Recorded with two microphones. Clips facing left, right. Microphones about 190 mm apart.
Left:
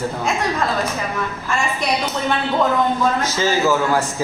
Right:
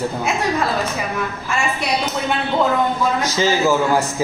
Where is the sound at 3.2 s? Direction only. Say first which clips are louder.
Right 1 dB; 10° right (ahead or behind).